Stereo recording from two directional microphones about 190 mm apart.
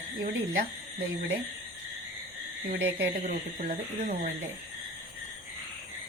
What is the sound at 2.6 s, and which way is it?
Speech, 45° right (ahead or behind).